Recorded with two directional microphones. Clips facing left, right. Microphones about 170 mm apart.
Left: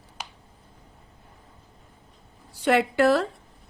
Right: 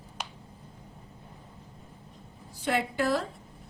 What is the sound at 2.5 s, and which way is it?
Speech, 75° left (ahead or behind).